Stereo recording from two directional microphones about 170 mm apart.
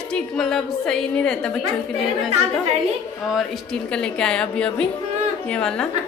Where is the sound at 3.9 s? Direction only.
5° left (ahead or behind).